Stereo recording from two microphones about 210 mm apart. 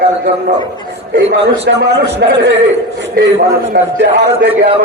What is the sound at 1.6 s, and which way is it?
A man's voice, 50° right (ahead or behind).